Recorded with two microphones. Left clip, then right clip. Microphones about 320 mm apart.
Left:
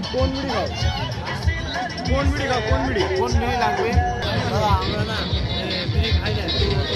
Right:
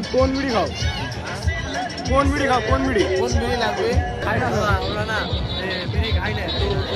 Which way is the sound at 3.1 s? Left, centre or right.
Centre.